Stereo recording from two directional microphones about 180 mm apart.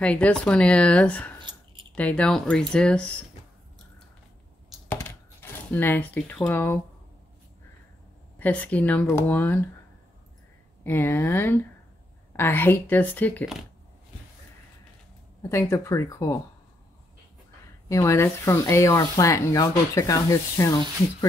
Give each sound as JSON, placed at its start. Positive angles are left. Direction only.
{"t": 0.0, "sound": "speech", "side_deg": 5}
{"t": 4.8, "sound": "a sound", "side_deg": 10}
{"t": 8.4, "sound": "speech", "side_deg": 10}
{"t": 10.8, "sound": "speech", "side_deg": 10}
{"t": 15.4, "sound": "speech", "side_deg": 15}
{"t": 17.8, "sound": "speech", "side_deg": 15}